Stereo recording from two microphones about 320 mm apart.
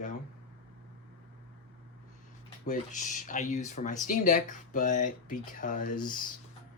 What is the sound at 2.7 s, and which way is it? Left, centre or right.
Speech, left.